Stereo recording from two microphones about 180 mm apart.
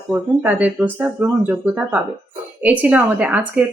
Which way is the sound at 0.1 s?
10° right (ahead or behind).